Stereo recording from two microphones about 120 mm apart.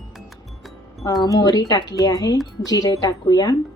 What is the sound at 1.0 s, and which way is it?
A woman's voice, 35° left (ahead or behind).